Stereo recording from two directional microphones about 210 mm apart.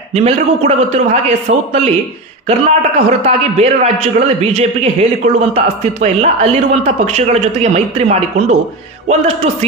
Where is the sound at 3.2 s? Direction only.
30° right (ahead or behind).